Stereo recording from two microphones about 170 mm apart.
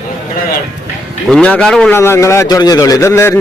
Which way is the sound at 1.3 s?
5° left (ahead or behind).